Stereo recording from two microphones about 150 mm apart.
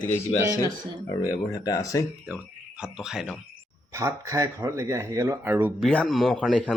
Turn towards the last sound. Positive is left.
turn(degrees=5)  # may be behind; listen again after turning